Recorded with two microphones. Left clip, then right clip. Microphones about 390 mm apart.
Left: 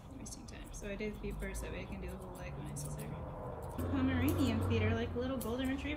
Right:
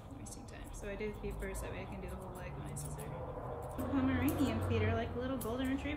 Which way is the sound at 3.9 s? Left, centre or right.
Centre.